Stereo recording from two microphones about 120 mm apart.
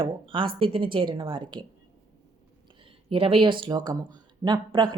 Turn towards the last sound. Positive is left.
turn(degrees=-40)  # may be behind; listen again after turning